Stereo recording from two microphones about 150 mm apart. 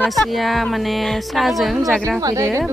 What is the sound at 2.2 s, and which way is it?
Speech, 20° right (ahead or behind).